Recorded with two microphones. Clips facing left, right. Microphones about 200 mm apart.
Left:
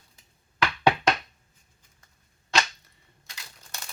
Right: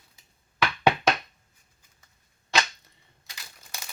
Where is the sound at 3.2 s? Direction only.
5° right (ahead or behind).